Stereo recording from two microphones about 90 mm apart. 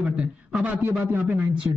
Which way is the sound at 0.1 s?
10° right (ahead or behind).